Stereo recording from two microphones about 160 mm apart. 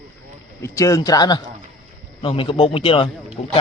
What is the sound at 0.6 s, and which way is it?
A man's voice, 20° left (ahead or behind).